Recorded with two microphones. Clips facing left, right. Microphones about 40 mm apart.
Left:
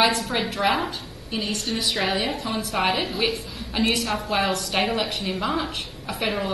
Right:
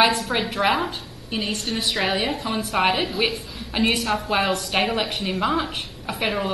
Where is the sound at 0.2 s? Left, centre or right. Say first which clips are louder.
Right 1 dB; centre.